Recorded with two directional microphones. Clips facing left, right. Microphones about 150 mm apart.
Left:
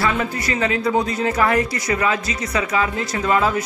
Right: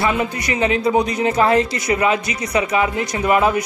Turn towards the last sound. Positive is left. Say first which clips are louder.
# right 2 dB
turn(degrees=-20)  # may be behind; listen again after turning